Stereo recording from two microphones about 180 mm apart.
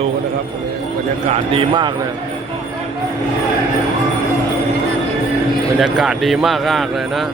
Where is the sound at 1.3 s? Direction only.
30° right (ahead or behind).